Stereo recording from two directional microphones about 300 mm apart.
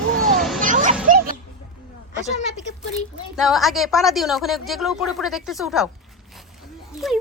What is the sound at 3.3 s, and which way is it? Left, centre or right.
Speech, centre.